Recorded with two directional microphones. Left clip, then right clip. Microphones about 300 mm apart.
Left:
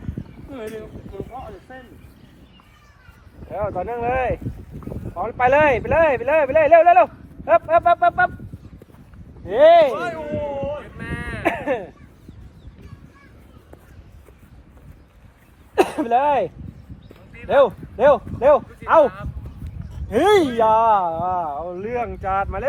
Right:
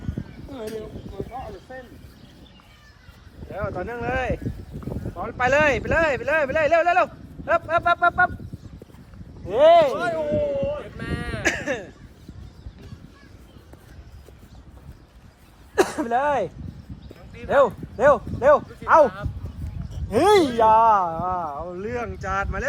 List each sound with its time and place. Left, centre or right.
3.5 s speech: left
9.5 s speech: left
9.9 s speech: centre
11.4 s a sound: centre
15.7 s a sound: left
17.6 s speech: left
20.1 s speech: left